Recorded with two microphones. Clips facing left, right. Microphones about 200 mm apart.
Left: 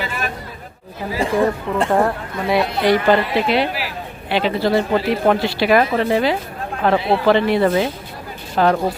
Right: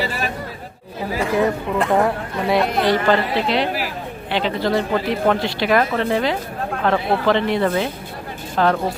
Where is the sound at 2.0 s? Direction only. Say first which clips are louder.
Even; centre (ahead or behind).